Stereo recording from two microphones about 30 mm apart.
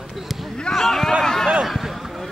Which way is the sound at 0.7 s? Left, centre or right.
Centre.